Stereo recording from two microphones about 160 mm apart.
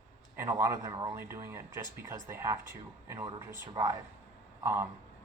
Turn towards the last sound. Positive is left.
turn(degrees=-15)  # may be behind; listen again after turning